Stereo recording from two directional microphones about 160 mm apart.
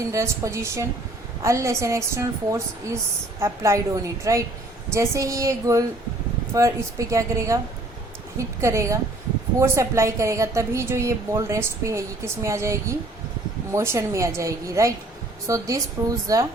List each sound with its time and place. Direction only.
0.1 s a woman's voice: 20° right (ahead or behind)